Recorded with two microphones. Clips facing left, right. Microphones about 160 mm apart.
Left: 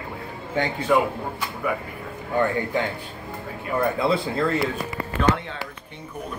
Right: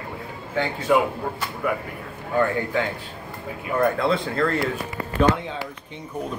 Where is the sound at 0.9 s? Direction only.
5° right (ahead or behind).